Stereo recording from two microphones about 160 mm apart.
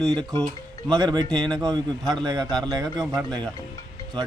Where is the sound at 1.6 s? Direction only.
25° right (ahead or behind).